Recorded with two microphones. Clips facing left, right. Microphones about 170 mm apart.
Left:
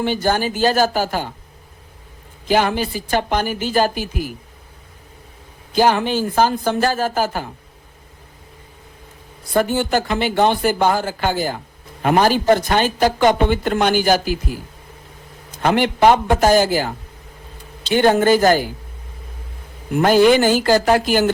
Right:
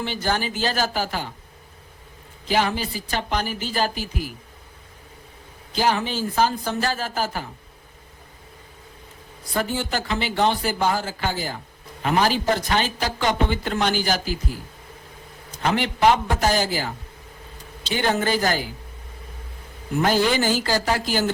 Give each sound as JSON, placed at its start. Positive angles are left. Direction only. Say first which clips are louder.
{"t": 0.0, "sound": "speech", "louder": "left 6 dB", "side_deg": 50}
{"t": 2.5, "sound": "speech", "louder": "left 5 dB", "side_deg": 55}
{"t": 5.7, "sound": "speech", "louder": "left 6 dB", "side_deg": 55}
{"t": 9.5, "sound": "speech", "louder": "left 8 dB", "side_deg": 50}
{"t": 15.5, "sound": "speech", "louder": "left 6 dB", "side_deg": 55}
{"t": 17.9, "sound": "speech", "louder": "left 9 dB", "side_deg": 50}
{"t": 20.0, "sound": "speech", "louder": "left 8 dB", "side_deg": 55}